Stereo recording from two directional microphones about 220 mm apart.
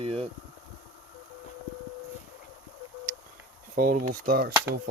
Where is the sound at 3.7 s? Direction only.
40° right (ahead or behind).